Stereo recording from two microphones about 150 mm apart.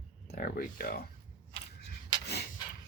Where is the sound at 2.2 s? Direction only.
90° left.